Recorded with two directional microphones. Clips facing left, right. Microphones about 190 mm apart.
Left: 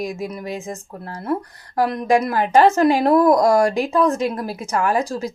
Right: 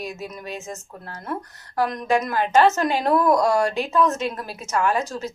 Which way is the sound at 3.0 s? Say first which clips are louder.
Left 2 dB; 35° left (ahead or behind).